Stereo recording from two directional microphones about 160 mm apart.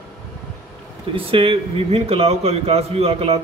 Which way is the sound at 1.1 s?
35° right (ahead or behind).